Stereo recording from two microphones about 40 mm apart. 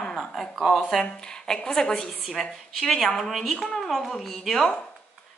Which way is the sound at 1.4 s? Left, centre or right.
Centre.